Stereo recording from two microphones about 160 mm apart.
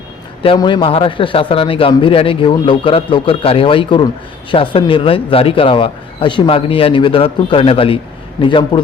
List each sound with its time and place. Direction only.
0.4 s a man's voice: 30° left (ahead or behind)